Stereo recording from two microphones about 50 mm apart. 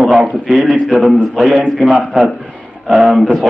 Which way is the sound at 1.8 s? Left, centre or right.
Centre.